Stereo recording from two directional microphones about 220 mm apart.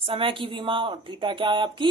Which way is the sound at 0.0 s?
25° right (ahead or behind).